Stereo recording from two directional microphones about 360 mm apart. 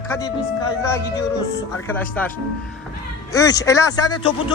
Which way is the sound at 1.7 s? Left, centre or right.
Centre.